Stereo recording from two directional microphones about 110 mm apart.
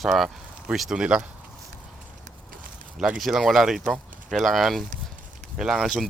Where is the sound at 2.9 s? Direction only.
5° right (ahead or behind).